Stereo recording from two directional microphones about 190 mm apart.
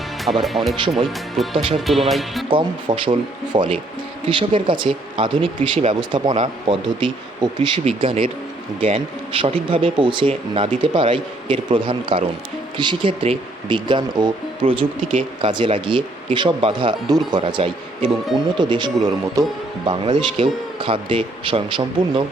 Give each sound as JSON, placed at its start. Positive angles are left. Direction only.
{"t": 0.3, "sound": "speech", "side_deg": 0}
{"t": 2.5, "sound": "speech", "side_deg": -25}
{"t": 5.5, "sound": "speech", "side_deg": -40}
{"t": 5.9, "sound": "speech", "side_deg": -25}